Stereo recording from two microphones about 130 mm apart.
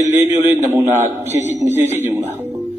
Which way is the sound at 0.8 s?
15° right (ahead or behind).